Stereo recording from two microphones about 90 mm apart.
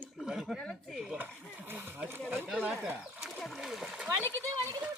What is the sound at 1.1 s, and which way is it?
Speech, 20° right (ahead or behind).